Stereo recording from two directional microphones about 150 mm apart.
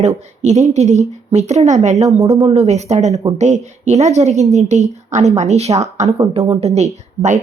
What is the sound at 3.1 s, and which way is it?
Speech, 25° right (ahead or behind).